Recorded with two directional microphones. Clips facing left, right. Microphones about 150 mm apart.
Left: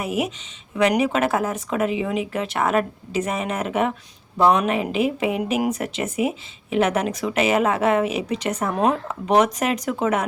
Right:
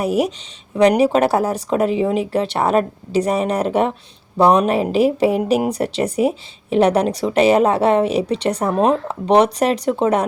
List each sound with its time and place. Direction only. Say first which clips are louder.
0.0 s a woman's voice: right 6 dB; 35° right (ahead or behind)